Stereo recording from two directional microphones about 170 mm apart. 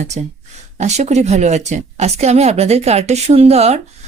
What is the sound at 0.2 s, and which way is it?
A woman's voice, 40° right (ahead or behind).